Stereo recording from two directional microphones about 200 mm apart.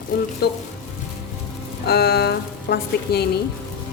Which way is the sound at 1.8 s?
55° left (ahead or behind).